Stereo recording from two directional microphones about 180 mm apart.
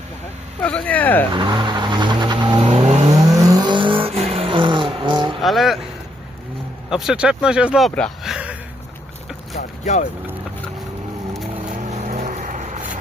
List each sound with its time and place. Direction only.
0.6 s speech: 10° left (ahead or behind)
1.3 s vehicle: 25° right (ahead or behind)
3.2 s vehicle: 20° right (ahead or behind)
5.4 s vehicle: centre (ahead or behind)
6.9 s speech: centre (ahead or behind)
9.6 s boat: 45° left (ahead or behind)
11.8 s vehicle: 40° right (ahead or behind)